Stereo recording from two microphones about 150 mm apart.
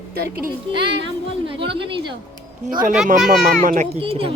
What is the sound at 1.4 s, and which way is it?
Speech, 35° right (ahead or behind).